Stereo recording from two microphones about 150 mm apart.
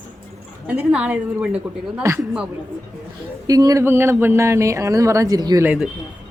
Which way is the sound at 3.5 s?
25° right (ahead or behind).